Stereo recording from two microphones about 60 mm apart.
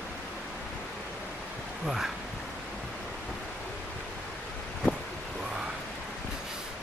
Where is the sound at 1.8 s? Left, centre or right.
Centre.